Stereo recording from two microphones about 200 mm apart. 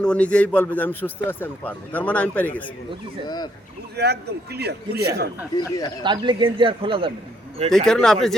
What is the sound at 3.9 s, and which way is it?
A man's voice, 55° right (ahead or behind).